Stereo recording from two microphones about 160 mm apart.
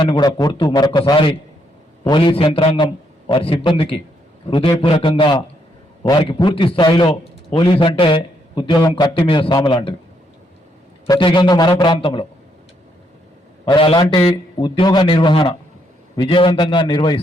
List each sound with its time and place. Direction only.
0.1 s a man's voice: 25° left (ahead or behind)
11.1 s a man's voice: 30° left (ahead or behind)
13.7 s a man's voice: 30° left (ahead or behind)